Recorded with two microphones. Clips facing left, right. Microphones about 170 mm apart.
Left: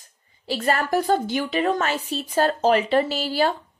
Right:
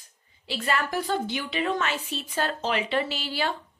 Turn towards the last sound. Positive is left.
turn(degrees=40)  # may be behind; listen again after turning